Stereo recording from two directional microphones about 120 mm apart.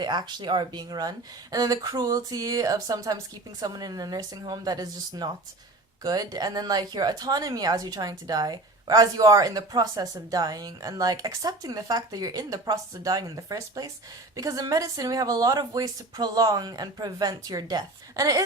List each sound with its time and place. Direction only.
0.0 s speech: 40° right (ahead or behind)